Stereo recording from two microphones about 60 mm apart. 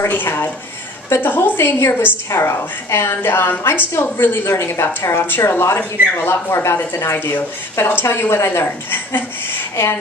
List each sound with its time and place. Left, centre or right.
0.0 s speech: left
4.5 s a woman's voice: left
5.1 s speech: left
5.4 s a woman's voice: left